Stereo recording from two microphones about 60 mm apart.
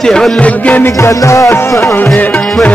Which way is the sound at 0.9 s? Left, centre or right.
Left.